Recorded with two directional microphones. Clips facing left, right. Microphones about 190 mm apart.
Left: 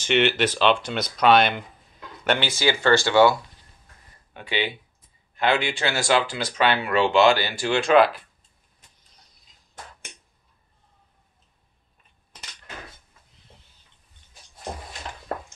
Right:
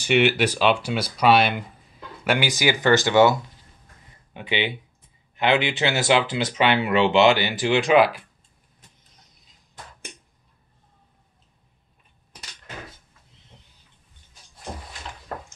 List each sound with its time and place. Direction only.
0.0 s speech: 10° right (ahead or behind)